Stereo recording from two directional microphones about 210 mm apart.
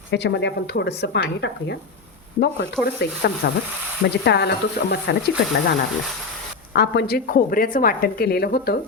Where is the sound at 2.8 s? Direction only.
50° left (ahead or behind).